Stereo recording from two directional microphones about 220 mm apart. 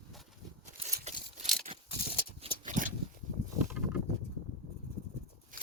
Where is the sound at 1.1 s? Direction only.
30° right (ahead or behind).